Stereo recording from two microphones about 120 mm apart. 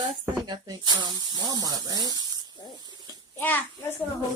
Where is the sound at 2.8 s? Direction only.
35° right (ahead or behind).